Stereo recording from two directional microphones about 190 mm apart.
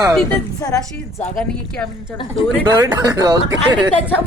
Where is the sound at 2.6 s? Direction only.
20° right (ahead or behind).